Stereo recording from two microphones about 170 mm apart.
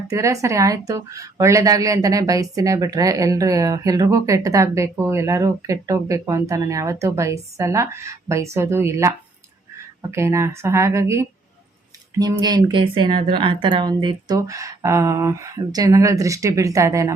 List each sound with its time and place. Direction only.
0.1 s a woman's voice: 20° right (ahead or behind)